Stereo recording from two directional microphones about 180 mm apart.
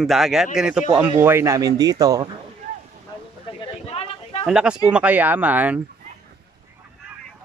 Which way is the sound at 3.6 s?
30° left (ahead or behind).